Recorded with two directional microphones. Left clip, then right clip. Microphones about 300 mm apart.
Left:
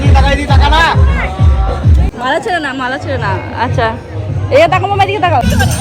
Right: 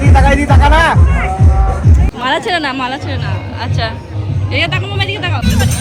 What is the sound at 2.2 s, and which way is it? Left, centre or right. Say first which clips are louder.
Speech: left 1 dB; centre.